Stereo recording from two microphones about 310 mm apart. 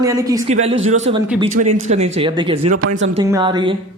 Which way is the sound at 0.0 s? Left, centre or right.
Centre.